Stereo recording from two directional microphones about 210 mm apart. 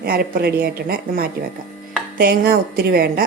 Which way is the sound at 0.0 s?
45° right (ahead or behind).